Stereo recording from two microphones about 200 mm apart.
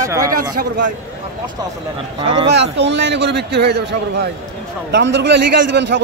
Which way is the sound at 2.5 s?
65° right (ahead or behind).